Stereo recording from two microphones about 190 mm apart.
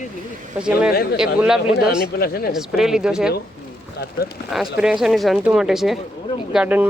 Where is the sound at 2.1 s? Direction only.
50° left (ahead or behind).